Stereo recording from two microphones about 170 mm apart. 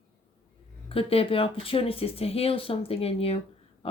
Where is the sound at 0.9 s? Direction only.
35° left (ahead or behind).